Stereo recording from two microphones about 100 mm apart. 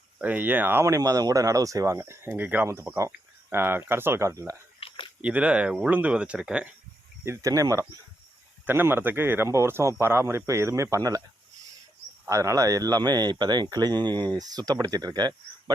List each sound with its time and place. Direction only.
0.2 s speech: 15° right (ahead or behind)
4.8 s a sound: 65° left (ahead or behind)
5.2 s speech: 10° right (ahead or behind)
7.3 s speech: 35° right (ahead or behind)
8.6 s speech: 20° right (ahead or behind)
12.2 s speech: 30° right (ahead or behind)